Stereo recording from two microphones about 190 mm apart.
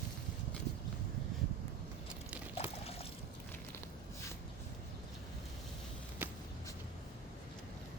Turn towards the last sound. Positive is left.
turn(degrees=-10)  # may be behind; listen again after turning